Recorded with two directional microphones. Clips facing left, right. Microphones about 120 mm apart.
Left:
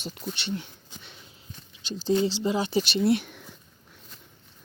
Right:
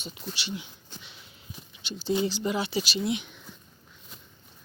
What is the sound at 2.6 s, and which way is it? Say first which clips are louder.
Speech: left 4 dB; 40° left (ahead or behind).